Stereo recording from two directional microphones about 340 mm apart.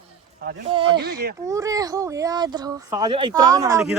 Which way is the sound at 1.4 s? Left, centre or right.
Centre.